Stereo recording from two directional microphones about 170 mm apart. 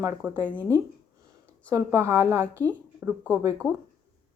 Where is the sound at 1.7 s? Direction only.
15° right (ahead or behind).